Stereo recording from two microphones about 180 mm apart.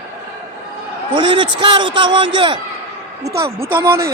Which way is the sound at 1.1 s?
25° right (ahead or behind).